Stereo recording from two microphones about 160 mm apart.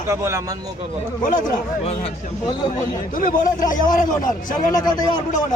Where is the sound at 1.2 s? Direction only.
55° left (ahead or behind).